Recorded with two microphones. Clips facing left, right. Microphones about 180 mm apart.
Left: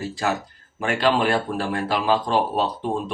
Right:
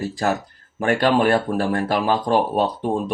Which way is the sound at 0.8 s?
45° right (ahead or behind).